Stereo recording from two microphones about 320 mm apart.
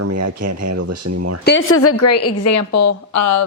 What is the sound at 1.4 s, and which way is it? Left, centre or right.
A woman's voice, left.